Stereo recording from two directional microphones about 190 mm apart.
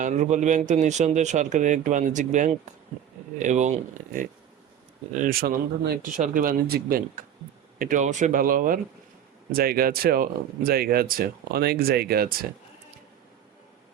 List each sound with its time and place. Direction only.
0.0 s speech: 40° right (ahead or behind)